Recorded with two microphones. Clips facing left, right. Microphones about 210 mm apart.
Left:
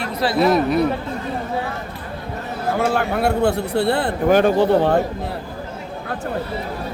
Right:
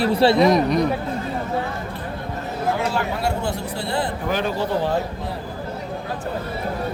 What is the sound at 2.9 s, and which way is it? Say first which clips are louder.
A man's voice: left 4 dB; 60° left (ahead or behind).